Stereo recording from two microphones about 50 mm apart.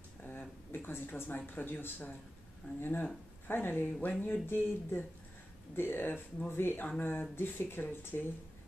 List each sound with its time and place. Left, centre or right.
0.2 s speech: left